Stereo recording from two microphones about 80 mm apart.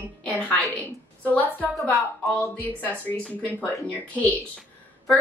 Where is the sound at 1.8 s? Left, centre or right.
Centre.